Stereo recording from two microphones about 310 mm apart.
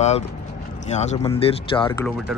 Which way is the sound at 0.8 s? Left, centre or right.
Left.